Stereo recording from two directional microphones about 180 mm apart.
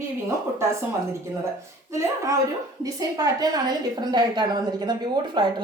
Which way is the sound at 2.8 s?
20° right (ahead or behind).